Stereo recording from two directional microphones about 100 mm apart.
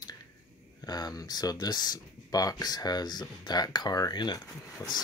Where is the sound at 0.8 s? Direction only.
40° left (ahead or behind).